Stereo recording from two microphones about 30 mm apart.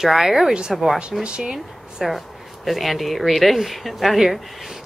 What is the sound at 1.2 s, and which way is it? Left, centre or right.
Speech, right.